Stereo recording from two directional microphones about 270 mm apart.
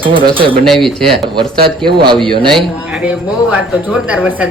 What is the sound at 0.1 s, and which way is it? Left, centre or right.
Speech, centre.